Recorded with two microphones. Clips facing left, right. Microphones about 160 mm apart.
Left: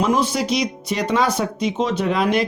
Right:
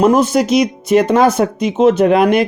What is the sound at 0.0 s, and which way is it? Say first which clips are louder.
Speech: right 8 dB; 45° right (ahead or behind).